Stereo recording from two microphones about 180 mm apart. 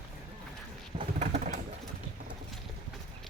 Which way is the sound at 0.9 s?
40° right (ahead or behind).